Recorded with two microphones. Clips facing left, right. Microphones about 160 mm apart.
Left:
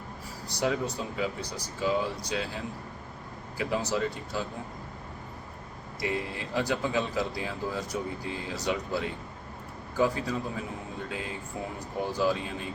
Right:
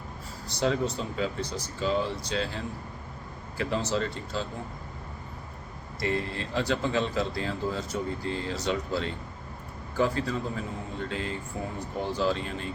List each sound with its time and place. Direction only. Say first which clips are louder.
0.4 s speech: right 2 dB; 10° left (ahead or behind)
6.0 s speech: right 2 dB; 10° left (ahead or behind)